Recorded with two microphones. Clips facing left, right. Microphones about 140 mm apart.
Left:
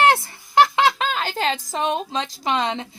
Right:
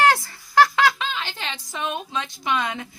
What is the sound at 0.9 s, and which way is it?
A woman's voice, 40° left (ahead or behind).